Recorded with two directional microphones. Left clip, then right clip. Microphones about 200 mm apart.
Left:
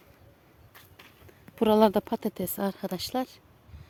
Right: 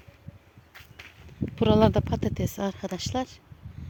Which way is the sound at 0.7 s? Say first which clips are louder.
Right 6 dB; 5° right (ahead or behind).